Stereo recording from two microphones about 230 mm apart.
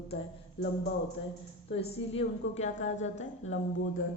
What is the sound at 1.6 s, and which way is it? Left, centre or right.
A woman's voice, left.